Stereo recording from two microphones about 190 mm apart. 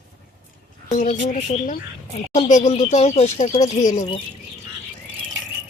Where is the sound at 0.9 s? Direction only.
40° left (ahead or behind).